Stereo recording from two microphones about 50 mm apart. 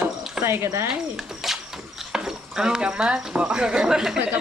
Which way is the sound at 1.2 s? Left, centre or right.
Centre.